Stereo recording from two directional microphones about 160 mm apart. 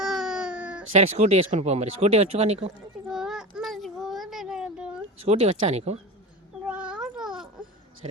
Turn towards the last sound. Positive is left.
turn(degrees=-5)  # may be behind; listen again after turning